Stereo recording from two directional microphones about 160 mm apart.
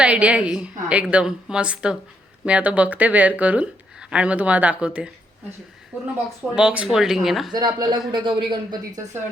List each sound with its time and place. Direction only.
0.0 s a woman's voice: 5° right (ahead or behind)
6.6 s speech: 5° right (ahead or behind)
7.5 s speech: 25° right (ahead or behind)